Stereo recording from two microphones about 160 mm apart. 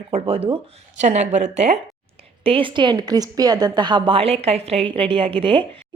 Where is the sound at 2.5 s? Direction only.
35° right (ahead or behind).